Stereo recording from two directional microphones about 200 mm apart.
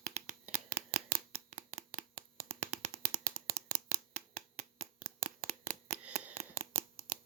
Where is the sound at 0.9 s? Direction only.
45° right (ahead or behind).